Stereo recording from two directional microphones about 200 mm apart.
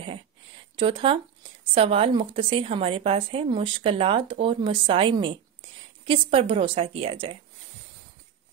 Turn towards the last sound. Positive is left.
turn(degrees=-25)  # may be behind; listen again after turning